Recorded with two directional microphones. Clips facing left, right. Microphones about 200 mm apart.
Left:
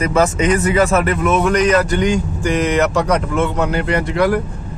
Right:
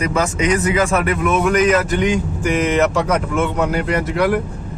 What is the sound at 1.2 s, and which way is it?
A man's voice, centre (ahead or behind).